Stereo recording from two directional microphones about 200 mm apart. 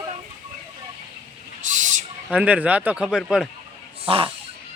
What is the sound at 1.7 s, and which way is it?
Owl, 40° right (ahead or behind).